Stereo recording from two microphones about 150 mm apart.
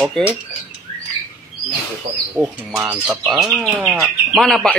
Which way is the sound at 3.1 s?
5° right (ahead or behind).